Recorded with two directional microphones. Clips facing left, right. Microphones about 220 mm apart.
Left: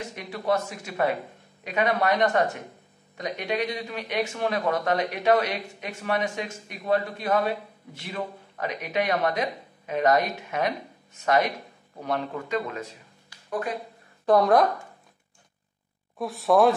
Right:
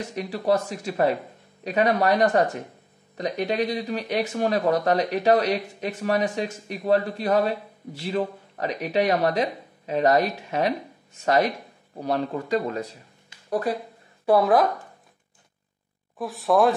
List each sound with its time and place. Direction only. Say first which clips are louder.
0.1 s speech: right 4 dB; 35° right (ahead or behind)
14.2 s speech: right 1 dB; 5° right (ahead or behind)
16.2 s speech: even; centre (ahead or behind)